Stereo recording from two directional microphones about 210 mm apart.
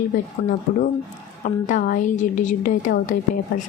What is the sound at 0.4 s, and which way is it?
Speech, 55° left (ahead or behind).